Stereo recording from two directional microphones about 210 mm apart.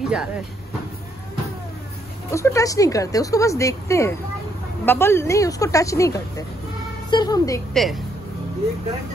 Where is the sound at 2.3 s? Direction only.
15° left (ahead or behind).